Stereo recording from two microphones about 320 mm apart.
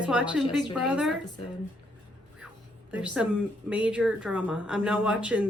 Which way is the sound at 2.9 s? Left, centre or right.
Centre.